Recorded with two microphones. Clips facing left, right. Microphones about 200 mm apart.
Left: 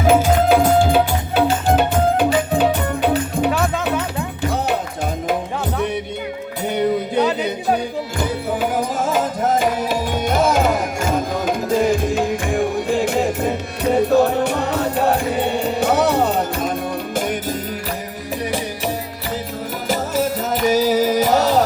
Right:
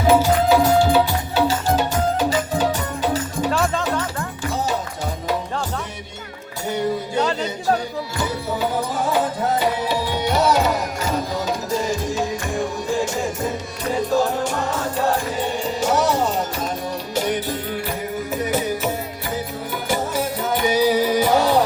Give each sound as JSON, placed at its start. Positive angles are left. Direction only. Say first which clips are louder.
{"t": 0.2, "sound": "music", "louder": "left 2 dB", "side_deg": 50}
{"t": 3.5, "sound": "music", "louder": "left 1 dB", "side_deg": 0}
{"t": 9.4, "sound": "music", "louder": "left 3 dB", "side_deg": 45}
{"t": 20.7, "sound": "music", "louder": "left 2 dB", "side_deg": 40}